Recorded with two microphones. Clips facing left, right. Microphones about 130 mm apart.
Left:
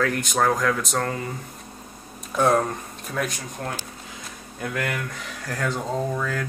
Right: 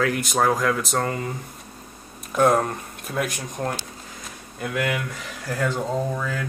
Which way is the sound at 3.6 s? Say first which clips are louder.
Right 4 dB; 15° right (ahead or behind).